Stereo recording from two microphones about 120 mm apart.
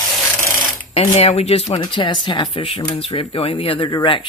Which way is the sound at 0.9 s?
55° left (ahead or behind).